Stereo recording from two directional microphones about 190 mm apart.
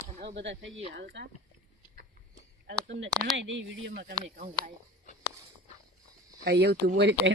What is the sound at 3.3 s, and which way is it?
Speech, 75° right (ahead or behind).